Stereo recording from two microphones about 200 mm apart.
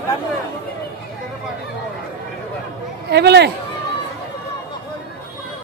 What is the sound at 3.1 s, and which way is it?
Speech, 55° right (ahead or behind).